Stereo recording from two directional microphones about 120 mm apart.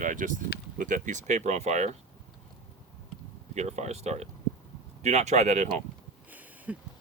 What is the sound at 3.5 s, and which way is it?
Speech, 70° right (ahead or behind).